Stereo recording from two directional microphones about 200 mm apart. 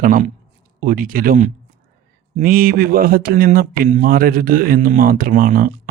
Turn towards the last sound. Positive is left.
turn(degrees=-45)  # may be behind; listen again after turning